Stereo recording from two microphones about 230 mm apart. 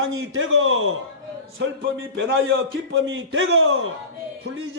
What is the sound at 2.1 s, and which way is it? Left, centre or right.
A man's voice, right.